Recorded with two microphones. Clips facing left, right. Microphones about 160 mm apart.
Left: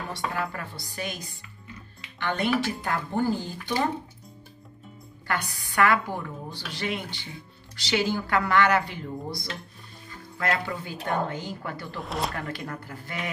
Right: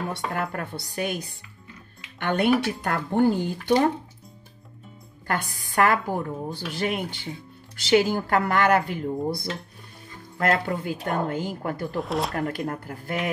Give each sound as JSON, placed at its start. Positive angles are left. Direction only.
{"t": 0.1, "sound": "speech", "side_deg": -55}
{"t": 5.2, "sound": "speech", "side_deg": -45}
{"t": 12.0, "sound": "speech", "side_deg": 0}
{"t": 12.4, "sound": "speech", "side_deg": -50}